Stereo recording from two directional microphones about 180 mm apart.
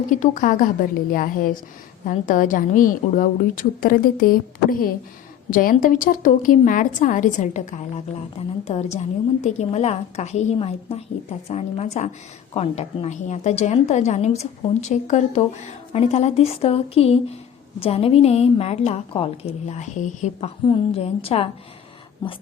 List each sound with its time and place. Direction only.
0.1 s a woman's voice: 45° left (ahead or behind)